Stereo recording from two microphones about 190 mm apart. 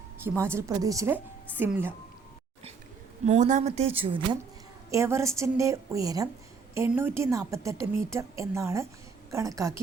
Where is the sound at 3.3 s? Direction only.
40° right (ahead or behind).